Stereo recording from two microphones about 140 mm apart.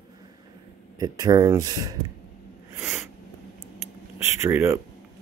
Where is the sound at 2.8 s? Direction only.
15° right (ahead or behind).